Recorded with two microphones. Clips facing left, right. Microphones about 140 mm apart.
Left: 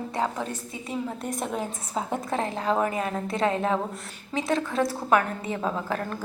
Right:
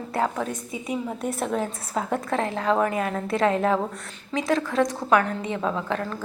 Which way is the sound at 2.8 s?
25° left (ahead or behind).